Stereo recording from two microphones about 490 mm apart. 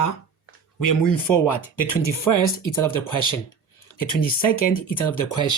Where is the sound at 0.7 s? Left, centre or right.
Left.